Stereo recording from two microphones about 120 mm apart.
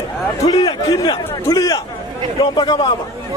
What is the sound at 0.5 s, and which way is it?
A man's voice, 40° left (ahead or behind).